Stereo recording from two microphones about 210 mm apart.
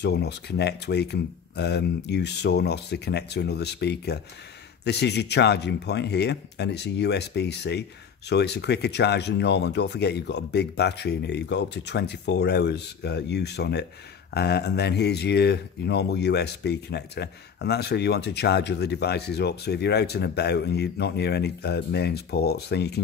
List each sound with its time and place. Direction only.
0.0 s speech: 50° left (ahead or behind)